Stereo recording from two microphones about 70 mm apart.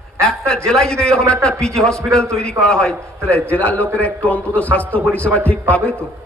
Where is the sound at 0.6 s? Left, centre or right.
Centre.